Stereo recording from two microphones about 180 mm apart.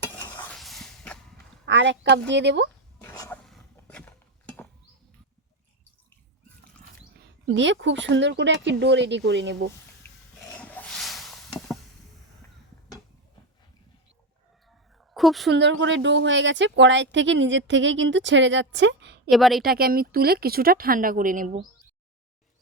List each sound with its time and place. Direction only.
0.0 s stir: 10° left (ahead or behind)
1.6 s speech: 80° right
3.0 s a sound: 15° left (ahead or behind)
7.4 s speech: 90° right; by 9.6 s 75° right (ahead or behind)
10.6 s a sound: 10° left (ahead or behind)
15.1 s a sound: centre (ahead or behind)
15.4 s a woman's voice: 80° right
19.3 s a woman's voice: centre (ahead or behind)
19.6 s a woman's voice: 55° right (ahead or behind)